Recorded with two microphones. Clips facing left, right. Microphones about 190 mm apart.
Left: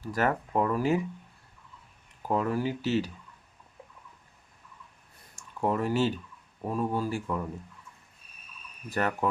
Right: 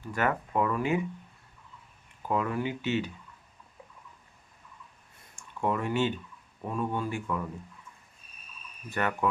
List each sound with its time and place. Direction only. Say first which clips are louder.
0.0 s speech: left 1 dB; 35° left (ahead or behind)
2.2 s speech: left 2 dB; 35° left (ahead or behind)
5.4 s speech: left 2 dB; 35° left (ahead or behind)
8.9 s speech: left 1 dB; 35° left (ahead or behind)